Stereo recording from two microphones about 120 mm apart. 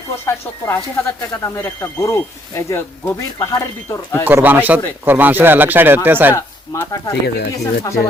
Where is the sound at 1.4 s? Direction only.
20° left (ahead or behind).